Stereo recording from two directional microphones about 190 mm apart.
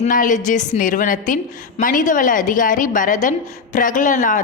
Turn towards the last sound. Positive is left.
turn(degrees=45)  # may be behind; listen again after turning